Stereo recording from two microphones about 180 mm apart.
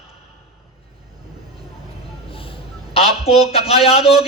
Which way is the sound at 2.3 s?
30° left (ahead or behind).